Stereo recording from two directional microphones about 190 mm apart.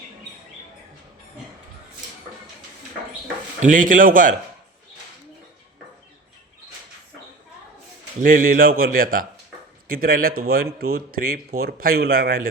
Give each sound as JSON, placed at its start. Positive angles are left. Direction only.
{"t": 3.6, "sound": "speech", "side_deg": -45}
{"t": 8.2, "sound": "speech", "side_deg": -45}